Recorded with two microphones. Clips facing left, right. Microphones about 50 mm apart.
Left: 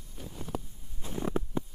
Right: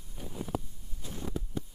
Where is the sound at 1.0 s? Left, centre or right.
Left.